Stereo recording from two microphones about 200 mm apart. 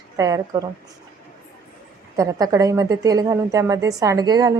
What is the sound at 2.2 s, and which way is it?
A woman's voice, 15° right (ahead or behind).